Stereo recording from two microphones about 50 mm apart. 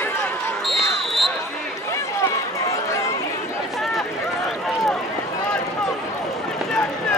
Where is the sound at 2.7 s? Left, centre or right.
Left.